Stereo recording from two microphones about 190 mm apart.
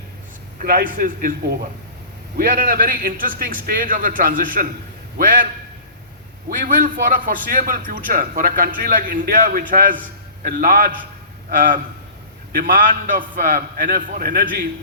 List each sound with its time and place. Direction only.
0.6 s a man's voice: 50° right (ahead or behind)
6.5 s a man's voice: 45° right (ahead or behind)